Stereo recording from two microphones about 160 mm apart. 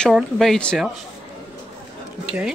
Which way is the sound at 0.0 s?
Centre (ahead or behind).